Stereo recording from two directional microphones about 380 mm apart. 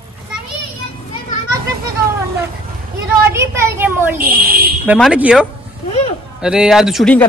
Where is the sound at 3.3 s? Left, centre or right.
Centre.